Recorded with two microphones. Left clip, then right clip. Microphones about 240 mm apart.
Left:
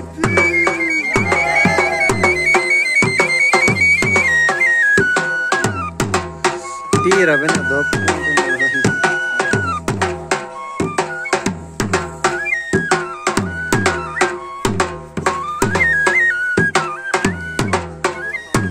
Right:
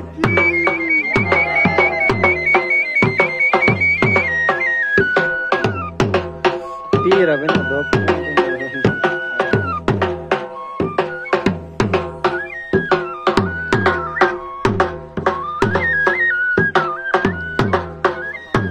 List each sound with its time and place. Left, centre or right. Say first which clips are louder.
0.2 s music: left 1 dB; left